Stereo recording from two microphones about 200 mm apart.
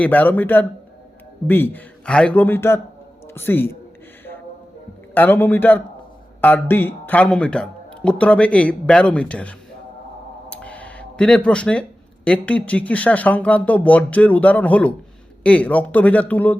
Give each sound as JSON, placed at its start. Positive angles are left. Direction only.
{"t": 0.0, "sound": "a man's voice", "side_deg": 10}
{"t": 5.1, "sound": "speech", "side_deg": 10}